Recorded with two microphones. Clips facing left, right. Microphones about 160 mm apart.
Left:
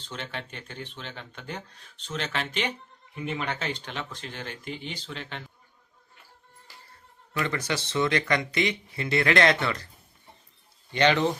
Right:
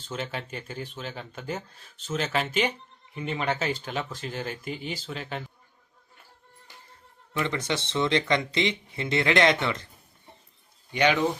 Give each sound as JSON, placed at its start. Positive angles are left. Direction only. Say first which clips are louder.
{"t": 0.1, "sound": "speech", "louder": "right 4 dB", "side_deg": -5}
{"t": 7.3, "sound": "speech", "louder": "right 1 dB", "side_deg": -20}
{"t": 10.9, "sound": "speech", "louder": "left 1 dB", "side_deg": -10}